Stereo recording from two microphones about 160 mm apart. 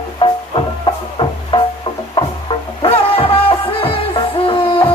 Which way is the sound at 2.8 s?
35° left (ahead or behind).